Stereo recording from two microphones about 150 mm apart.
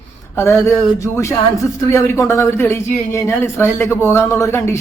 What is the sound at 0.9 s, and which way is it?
Speech, 20° left (ahead or behind).